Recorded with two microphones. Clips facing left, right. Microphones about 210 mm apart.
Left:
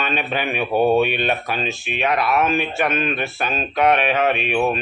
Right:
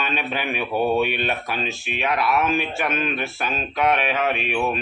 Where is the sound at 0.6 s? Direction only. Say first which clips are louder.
Left 5 dB; 20° left (ahead or behind).